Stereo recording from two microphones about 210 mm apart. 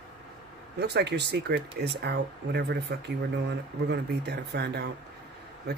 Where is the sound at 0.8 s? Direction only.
50° right (ahead or behind).